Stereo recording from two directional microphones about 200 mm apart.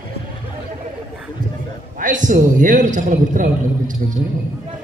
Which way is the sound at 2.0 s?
40° right (ahead or behind).